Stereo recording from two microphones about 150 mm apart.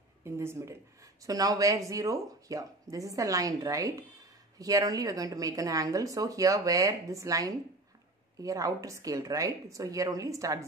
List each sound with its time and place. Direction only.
0.2 s speech: 15° right (ahead or behind)